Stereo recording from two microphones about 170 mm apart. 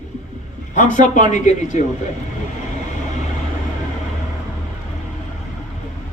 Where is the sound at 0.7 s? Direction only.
50° left (ahead or behind).